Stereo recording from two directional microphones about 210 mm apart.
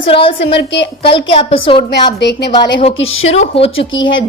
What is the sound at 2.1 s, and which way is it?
Speech, 55° left (ahead or behind).